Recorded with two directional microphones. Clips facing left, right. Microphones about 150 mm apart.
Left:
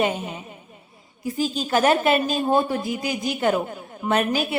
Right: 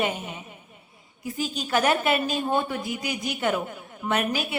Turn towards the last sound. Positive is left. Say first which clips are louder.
# left 4 dB
turn(degrees=35)  # may be behind; listen again after turning